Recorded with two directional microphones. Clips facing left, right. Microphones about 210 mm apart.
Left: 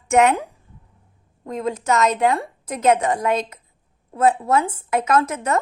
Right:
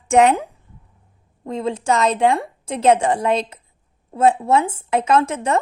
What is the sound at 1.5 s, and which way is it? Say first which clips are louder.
A woman's voice: right 2 dB; 30° right (ahead or behind).